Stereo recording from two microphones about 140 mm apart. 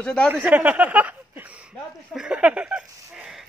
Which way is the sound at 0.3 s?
10° right (ahead or behind).